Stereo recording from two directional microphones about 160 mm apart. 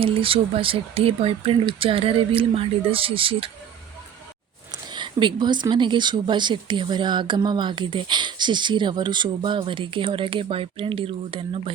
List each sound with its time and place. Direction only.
0.0 s speech: 35° right (ahead or behind)
4.7 s speech: 30° right (ahead or behind)